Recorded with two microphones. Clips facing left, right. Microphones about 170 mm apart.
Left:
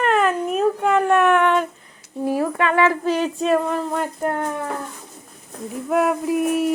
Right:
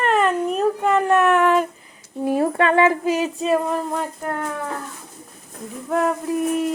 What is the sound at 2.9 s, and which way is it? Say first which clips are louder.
Speech: even; 10° right (ahead or behind).